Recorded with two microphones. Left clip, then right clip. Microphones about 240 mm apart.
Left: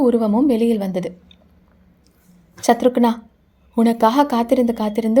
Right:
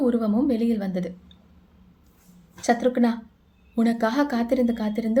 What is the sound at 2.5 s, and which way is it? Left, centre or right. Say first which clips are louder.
A woman's voice: left 6 dB; left.